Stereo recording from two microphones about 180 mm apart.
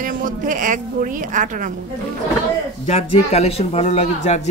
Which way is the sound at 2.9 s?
35° left (ahead or behind).